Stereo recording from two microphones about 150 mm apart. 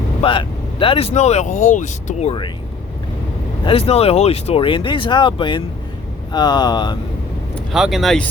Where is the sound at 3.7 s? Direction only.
40° left (ahead or behind).